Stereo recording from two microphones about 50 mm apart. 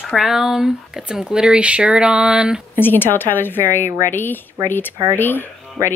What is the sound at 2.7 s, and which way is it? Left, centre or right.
A woman's voice, left.